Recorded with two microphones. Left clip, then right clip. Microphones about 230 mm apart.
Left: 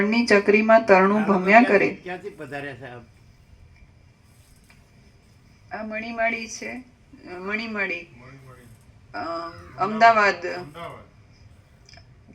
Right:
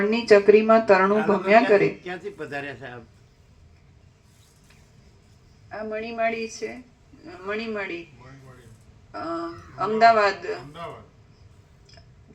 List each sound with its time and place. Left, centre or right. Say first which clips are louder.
0.3 s speech: right 2 dB; left
2.0 s speech: right 1 dB; centre
5.6 s speech: even; left
9.1 s speech: left 1 dB; left